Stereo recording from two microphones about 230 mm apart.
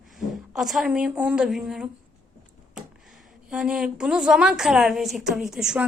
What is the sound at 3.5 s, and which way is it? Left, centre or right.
A woman's voice, centre.